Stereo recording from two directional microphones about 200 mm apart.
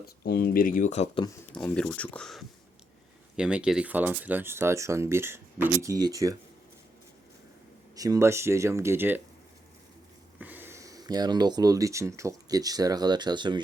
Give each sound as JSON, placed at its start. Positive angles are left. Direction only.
{"t": 0.2, "sound": "speech", "side_deg": 50}
{"t": 1.5, "sound": "speech", "side_deg": 5}
{"t": 7.9, "sound": "speech", "side_deg": -15}
{"t": 10.3, "sound": "speech", "side_deg": -10}